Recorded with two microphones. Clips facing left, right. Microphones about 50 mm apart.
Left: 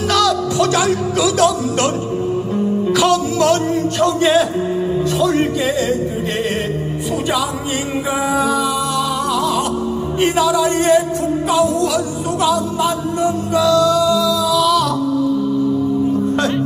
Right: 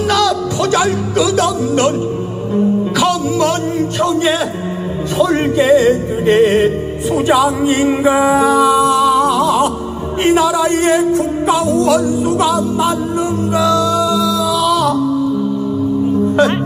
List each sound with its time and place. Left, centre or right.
0.1 s speech: centre
2.5 s music: centre
4.0 s speech: centre
5.2 s music: centre
8.0 s music: centre